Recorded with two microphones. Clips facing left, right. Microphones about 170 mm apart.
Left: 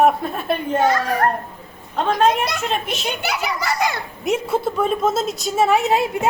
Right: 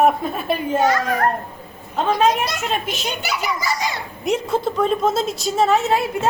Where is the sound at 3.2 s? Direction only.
60° left (ahead or behind).